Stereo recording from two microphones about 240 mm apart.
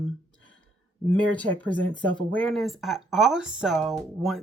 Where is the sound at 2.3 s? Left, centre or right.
Centre.